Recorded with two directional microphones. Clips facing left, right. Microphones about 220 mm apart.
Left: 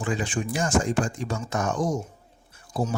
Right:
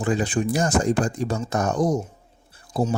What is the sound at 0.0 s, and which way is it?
Speech, 40° right (ahead or behind).